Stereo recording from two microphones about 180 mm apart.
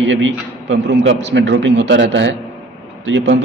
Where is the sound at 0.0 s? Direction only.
90° right.